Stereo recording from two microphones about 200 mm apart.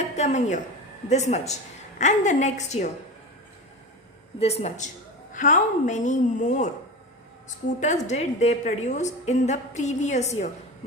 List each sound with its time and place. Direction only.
0.0 s a woman's voice: 35° left (ahead or behind)
4.4 s a woman's voice: 30° left (ahead or behind)
7.8 s a woman's voice: 35° left (ahead or behind)